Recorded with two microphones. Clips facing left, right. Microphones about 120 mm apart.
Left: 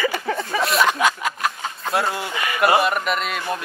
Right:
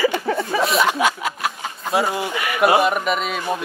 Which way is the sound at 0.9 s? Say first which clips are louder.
Even; 15° right (ahead or behind).